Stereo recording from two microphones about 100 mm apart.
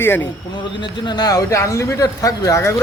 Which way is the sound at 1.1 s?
40° left (ahead or behind).